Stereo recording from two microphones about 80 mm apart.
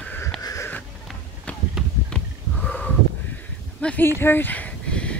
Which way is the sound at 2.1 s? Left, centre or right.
Centre.